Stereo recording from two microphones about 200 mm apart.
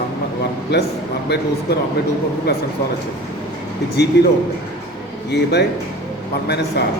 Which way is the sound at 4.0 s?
55° left (ahead or behind).